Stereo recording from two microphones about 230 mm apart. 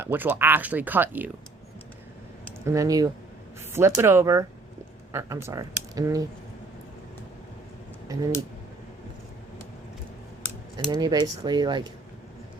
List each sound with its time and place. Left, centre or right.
0.0 s speech: centre
2.6 s speech: centre
8.1 s speech: centre
11.0 s speech: centre